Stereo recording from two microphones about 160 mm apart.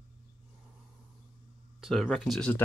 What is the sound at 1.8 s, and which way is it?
Speech, centre (ahead or behind).